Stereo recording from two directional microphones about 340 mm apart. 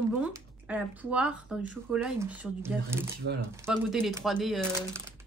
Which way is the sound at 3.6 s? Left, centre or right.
Centre.